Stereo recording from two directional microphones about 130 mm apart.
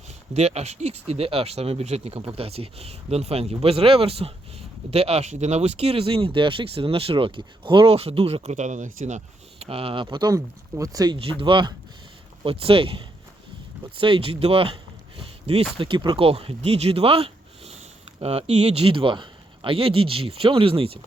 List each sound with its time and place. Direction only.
0.3 s speech: 55° right (ahead or behind)
9.6 s speech: 45° right (ahead or behind); by 11.2 s 30° right (ahead or behind)
11.3 s speech: 40° right (ahead or behind)
15.2 s a sound: 50° right (ahead or behind)
15.8 s speech: 40° right (ahead or behind)